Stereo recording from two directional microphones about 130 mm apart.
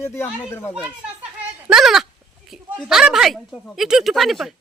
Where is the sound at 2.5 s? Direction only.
5° right (ahead or behind).